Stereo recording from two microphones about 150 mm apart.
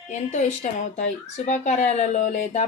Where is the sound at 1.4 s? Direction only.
50° left (ahead or behind).